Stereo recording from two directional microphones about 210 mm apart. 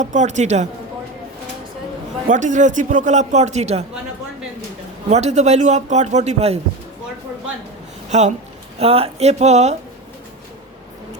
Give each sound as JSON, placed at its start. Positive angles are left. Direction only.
{"t": 0.0, "sound": "a man's voice", "side_deg": -35}
{"t": 2.2, "sound": "a man's voice", "side_deg": -35}
{"t": 5.0, "sound": "a man's voice", "side_deg": -35}
{"t": 8.1, "sound": "a man's voice", "side_deg": -35}